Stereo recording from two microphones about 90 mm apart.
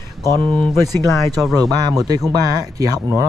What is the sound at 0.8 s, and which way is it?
Speech, 45° right (ahead or behind).